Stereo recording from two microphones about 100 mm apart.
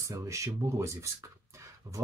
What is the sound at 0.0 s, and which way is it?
Speech, 30° right (ahead or behind).